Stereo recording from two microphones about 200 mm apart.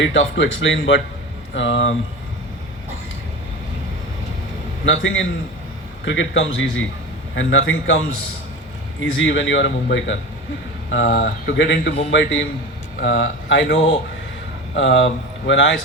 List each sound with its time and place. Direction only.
0.0 s speech: 70° left (ahead or behind)
4.9 s speech: 70° left (ahead or behind)
9.1 s speech: 70° left (ahead or behind)
14.8 s speech: 70° left (ahead or behind)